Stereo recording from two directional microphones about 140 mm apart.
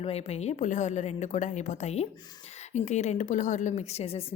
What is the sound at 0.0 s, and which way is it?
A woman's voice, 50° left (ahead or behind).